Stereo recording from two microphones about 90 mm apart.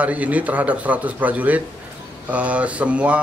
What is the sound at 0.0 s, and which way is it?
A man's voice, 15° right (ahead or behind).